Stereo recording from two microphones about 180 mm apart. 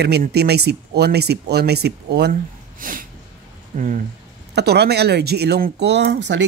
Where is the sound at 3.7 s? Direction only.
45° right (ahead or behind).